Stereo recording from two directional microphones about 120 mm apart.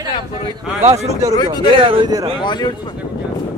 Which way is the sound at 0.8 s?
70° right (ahead or behind).